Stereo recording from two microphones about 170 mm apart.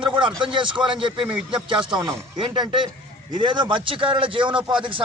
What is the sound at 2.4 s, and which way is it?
A man's voice, 30° right (ahead or behind).